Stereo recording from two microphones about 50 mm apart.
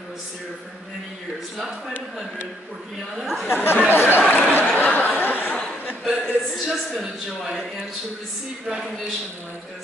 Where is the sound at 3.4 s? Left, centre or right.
Left.